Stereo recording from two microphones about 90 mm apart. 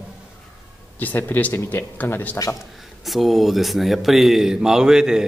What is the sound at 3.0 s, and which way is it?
Speech, centre (ahead or behind).